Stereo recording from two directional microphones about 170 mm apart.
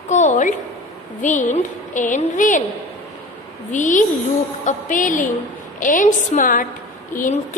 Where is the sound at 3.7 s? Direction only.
50° left (ahead or behind).